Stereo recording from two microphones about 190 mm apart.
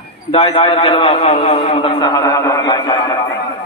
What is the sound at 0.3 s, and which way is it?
Speech, 30° left (ahead or behind).